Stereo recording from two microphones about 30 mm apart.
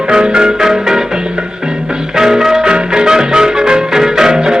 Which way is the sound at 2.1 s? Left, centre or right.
Centre.